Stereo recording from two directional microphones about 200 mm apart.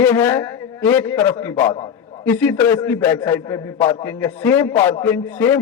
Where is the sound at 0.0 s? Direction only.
10° left (ahead or behind).